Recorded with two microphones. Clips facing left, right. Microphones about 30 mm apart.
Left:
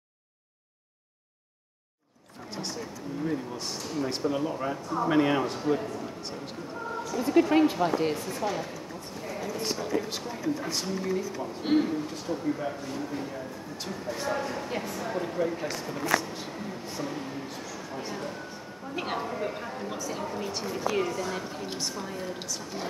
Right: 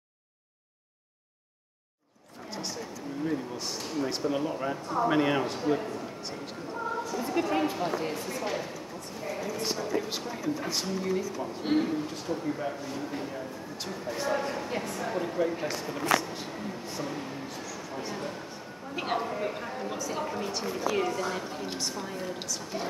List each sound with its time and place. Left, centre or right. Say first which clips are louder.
2.5 s vehicle: left 1 dB; centre
3.3 s speech: even; centre
7.0 s a sound: left 1 dB; centre
7.7 s speech: left 4 dB; centre
8.5 s a sound: left 1 dB; centre
10.0 s speech: left 1 dB; centre
17.5 s a sound: even; centre
17.9 s speech: even; centre
20.2 s speech: even; centre
20.5 s speech: left 1 dB; centre